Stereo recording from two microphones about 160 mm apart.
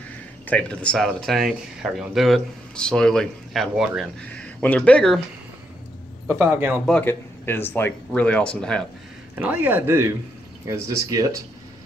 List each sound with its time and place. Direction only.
0.5 s speech: 10° left (ahead or behind)
4.3 s speech: 10° left (ahead or behind)
6.2 s speech: 15° right (ahead or behind)
6.9 s speech: 10° left (ahead or behind)
9.3 s speech: 10° right (ahead or behind)